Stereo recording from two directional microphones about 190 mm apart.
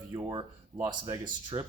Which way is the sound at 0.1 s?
25° right (ahead or behind).